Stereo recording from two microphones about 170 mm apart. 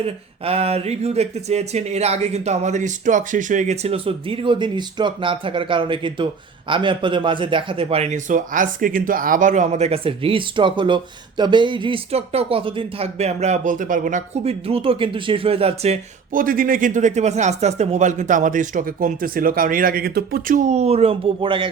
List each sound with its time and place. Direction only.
0.0 s a man's voice: 35° right (ahead or behind)
14.7 s a man's voice: 35° right (ahead or behind)
16.3 s speech: 55° right (ahead or behind)
20.6 s a man's voice: 40° right (ahead or behind)